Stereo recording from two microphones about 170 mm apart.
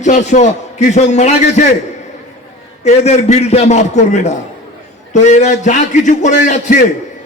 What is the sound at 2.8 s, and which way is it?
A man's voice, 40° left (ahead or behind).